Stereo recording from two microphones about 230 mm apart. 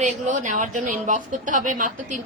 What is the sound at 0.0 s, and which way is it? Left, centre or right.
A woman's voice, right.